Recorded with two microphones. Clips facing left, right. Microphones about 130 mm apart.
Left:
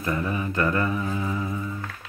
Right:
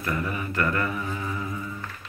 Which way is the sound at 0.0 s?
25° left (ahead or behind).